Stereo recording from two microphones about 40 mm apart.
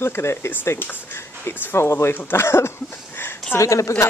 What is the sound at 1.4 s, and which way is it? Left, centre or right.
A woman's voice, left.